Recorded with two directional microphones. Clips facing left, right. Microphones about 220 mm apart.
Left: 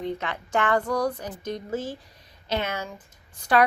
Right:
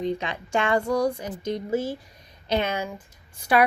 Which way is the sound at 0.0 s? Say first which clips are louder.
Right 3 dB; 15° right (ahead or behind).